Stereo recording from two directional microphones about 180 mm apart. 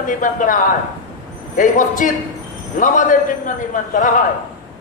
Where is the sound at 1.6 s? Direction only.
45° left (ahead or behind).